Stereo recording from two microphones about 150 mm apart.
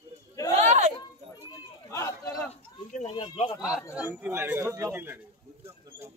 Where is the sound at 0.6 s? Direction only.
50° right (ahead or behind).